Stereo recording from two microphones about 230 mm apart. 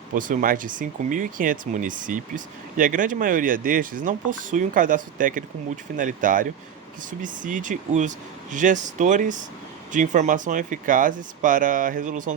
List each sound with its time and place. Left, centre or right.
0.1 s speech: right